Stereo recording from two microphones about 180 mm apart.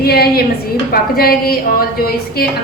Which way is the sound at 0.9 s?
55° left (ahead or behind).